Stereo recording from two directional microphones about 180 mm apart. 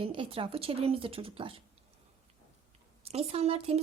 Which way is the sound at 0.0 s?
30° right (ahead or behind).